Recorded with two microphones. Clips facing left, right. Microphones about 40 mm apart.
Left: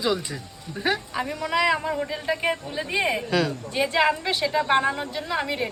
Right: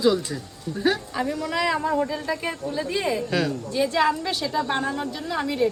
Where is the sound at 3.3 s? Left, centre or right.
Centre.